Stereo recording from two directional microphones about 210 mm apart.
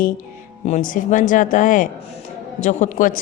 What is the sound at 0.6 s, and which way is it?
A man's voice, 35° left (ahead or behind).